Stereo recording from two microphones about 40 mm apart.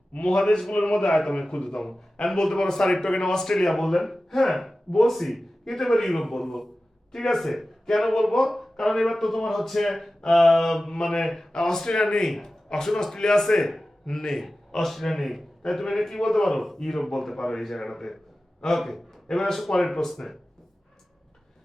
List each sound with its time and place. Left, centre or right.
0.1 s a man's voice: left; by 20.3 s centre